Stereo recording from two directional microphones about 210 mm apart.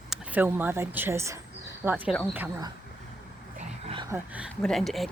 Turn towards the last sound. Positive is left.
turn(degrees=0)  # may be behind; listen again after turning